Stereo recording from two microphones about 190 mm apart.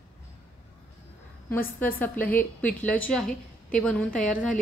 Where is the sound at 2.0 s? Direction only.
10° left (ahead or behind).